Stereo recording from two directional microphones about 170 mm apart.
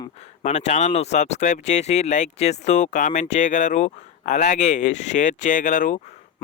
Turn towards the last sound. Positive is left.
turn(degrees=50)  # may be behind; listen again after turning